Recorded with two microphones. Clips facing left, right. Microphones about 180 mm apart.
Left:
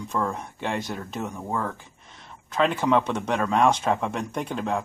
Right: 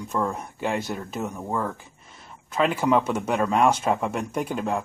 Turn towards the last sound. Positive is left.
turn(degrees=-5)  # may be behind; listen again after turning